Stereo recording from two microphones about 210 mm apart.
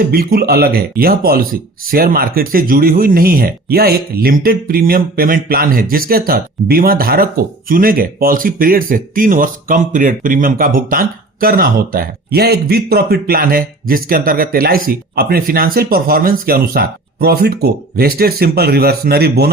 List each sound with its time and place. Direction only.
0.0 s speech: 45° right (ahead or behind)